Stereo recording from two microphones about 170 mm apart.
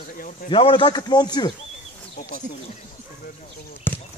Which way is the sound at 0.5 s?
30° left (ahead or behind).